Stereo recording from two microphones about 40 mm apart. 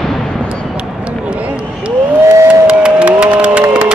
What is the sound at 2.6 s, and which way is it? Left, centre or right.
Music, right.